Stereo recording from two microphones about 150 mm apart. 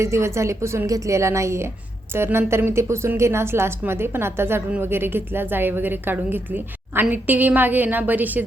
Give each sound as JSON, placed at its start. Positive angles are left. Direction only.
{"t": 0.0, "sound": "a woman's voice", "side_deg": -20}